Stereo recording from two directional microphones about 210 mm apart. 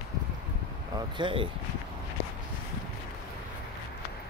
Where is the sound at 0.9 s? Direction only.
20° right (ahead or behind).